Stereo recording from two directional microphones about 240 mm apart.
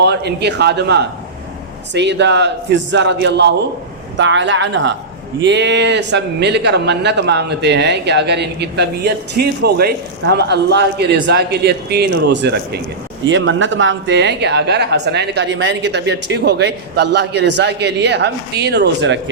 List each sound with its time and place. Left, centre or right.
0.0 s speech: right